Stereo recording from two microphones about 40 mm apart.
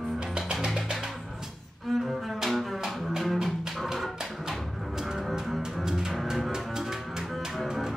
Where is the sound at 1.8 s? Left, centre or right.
Centre.